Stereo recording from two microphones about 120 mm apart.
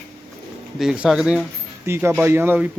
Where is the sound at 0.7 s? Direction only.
5° right (ahead or behind).